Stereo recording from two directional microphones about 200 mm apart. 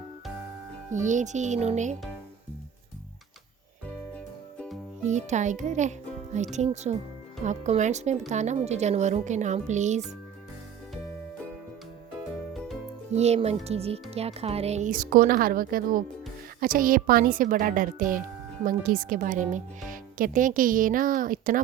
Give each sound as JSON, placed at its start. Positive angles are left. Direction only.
{"t": 0.9, "sound": "speech", "side_deg": -40}
{"t": 5.0, "sound": "speech", "side_deg": -35}
{"t": 13.1, "sound": "a child's voice", "side_deg": -35}